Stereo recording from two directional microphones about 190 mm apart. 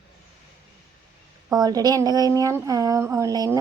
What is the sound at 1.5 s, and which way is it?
A woman's voice, 20° right (ahead or behind).